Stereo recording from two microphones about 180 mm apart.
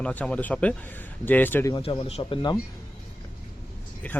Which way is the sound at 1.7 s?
25° left (ahead or behind).